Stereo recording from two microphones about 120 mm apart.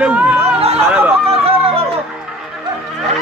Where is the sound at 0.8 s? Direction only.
15° right (ahead or behind).